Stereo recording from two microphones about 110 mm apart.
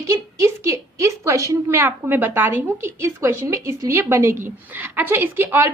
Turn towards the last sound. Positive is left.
turn(degrees=-20)  # may be behind; listen again after turning